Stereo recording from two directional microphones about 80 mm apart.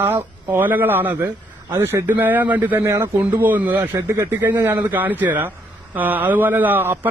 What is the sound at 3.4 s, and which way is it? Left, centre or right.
Speech, right.